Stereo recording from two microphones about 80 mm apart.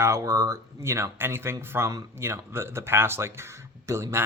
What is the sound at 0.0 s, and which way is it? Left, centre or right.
Speech, right.